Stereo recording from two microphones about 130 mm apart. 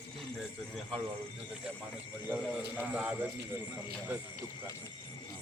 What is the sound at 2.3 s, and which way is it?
Speech, 10° right (ahead or behind).